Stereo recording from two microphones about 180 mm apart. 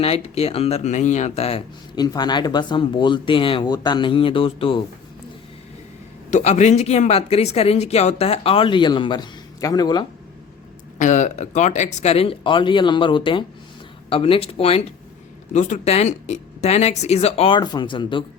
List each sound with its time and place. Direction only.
0.0 s speech: 35° left (ahead or behind)
2.0 s speech: 20° left (ahead or behind)
6.3 s speech: 40° left (ahead or behind); by 10.1 s 25° left (ahead or behind)
10.9 s speech: 45° left (ahead or behind); by 18.3 s 25° left (ahead or behind)